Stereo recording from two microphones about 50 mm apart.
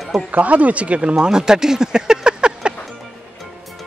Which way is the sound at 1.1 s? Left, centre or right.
Centre.